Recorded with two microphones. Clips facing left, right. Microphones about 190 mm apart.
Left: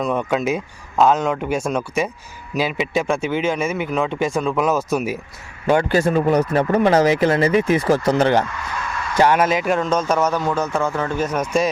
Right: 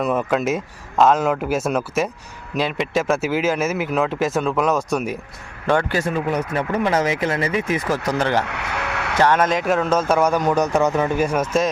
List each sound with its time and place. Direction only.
0.0 s speech: 5° right (ahead or behind)
5.9 s speech: 35° left (ahead or behind)
8.0 s speech: 20° left (ahead or behind)
8.4 s radio: 70° right (ahead or behind)
9.1 s speech: 10° left (ahead or behind)